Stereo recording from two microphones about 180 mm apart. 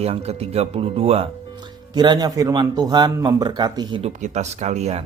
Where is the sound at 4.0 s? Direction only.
40° right (ahead or behind).